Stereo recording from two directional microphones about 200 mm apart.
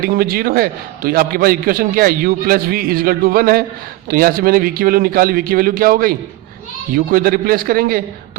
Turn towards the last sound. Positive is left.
turn(degrees=-45)  # may be behind; listen again after turning